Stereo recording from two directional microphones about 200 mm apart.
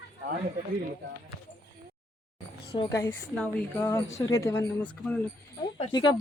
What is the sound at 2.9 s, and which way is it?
A woman's voice, 10° left (ahead or behind).